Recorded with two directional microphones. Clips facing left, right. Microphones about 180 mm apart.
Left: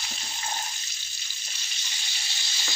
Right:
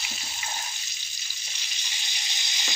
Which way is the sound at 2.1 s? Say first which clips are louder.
Right 2 dB; 20° right (ahead or behind).